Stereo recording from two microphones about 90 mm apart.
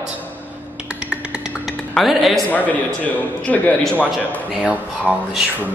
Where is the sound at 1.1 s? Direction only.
10° right (ahead or behind).